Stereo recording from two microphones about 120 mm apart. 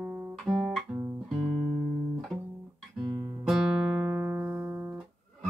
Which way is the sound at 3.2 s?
25° right (ahead or behind).